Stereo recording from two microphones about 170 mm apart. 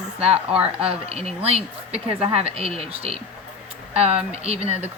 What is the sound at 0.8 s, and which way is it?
Speech, 35° right (ahead or behind).